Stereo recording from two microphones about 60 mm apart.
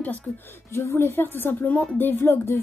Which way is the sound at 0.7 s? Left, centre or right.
Left.